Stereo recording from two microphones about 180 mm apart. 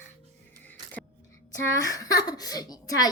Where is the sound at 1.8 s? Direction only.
20° left (ahead or behind).